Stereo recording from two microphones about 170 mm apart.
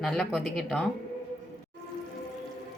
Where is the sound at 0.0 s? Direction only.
Centre (ahead or behind).